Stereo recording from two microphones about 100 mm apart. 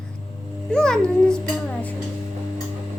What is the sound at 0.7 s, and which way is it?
Music, 5° left (ahead or behind).